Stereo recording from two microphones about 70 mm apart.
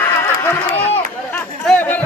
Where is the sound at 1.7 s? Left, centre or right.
Left.